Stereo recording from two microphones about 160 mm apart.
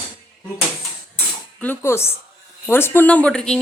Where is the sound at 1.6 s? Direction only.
15° left (ahead or behind).